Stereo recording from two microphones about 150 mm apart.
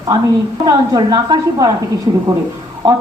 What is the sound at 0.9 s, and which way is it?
A woman's voice, 30° right (ahead or behind).